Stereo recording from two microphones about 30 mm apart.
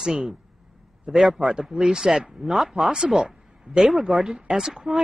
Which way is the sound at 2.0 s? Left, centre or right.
Centre.